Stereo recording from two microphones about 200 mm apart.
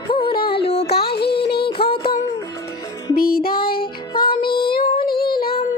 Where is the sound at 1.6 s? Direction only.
25° left (ahead or behind).